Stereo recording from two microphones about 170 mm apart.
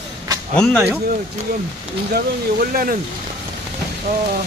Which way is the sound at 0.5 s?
5° left (ahead or behind).